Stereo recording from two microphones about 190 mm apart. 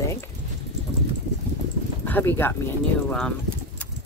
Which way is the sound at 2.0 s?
10° left (ahead or behind).